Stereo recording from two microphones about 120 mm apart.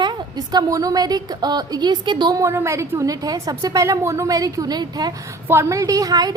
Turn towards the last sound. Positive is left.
turn(degrees=-35)  # may be behind; listen again after turning